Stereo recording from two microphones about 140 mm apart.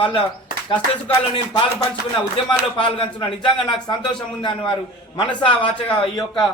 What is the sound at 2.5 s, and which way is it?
A man's voice, 35° left (ahead or behind).